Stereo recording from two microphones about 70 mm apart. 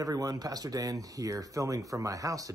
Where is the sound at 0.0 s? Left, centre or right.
Right.